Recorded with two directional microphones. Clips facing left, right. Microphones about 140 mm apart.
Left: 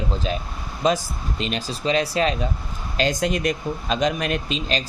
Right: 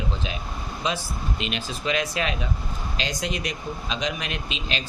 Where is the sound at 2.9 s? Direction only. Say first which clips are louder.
Left 9 dB; 50° left (ahead or behind).